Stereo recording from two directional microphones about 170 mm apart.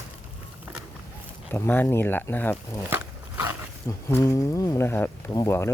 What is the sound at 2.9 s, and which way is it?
Dog, 15° right (ahead or behind).